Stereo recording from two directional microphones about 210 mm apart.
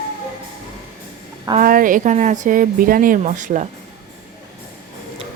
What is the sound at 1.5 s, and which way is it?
A woman's voice, 40° right (ahead or behind).